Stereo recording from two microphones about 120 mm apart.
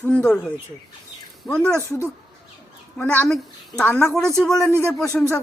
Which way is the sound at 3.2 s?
Centre (ahead or behind).